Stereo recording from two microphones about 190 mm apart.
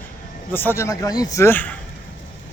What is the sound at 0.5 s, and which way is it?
Speech, 10° left (ahead or behind).